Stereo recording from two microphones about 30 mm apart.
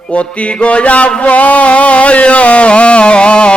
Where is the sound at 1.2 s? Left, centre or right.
Left.